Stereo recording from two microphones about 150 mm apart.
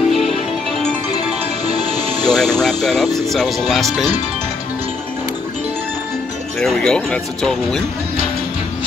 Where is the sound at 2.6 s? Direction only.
Centre (ahead or behind).